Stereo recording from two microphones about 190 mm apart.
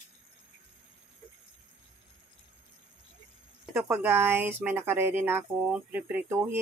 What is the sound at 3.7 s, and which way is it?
Speech, 10° right (ahead or behind).